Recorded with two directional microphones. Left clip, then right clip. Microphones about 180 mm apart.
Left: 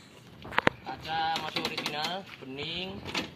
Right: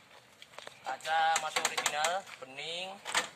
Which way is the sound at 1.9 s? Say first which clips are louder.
Right 1 dB; 20° right (ahead or behind).